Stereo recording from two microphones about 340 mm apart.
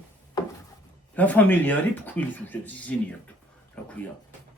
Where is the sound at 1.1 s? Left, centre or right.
Centre.